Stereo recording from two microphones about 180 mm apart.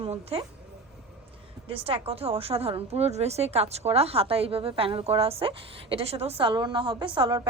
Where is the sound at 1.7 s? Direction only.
30° right (ahead or behind).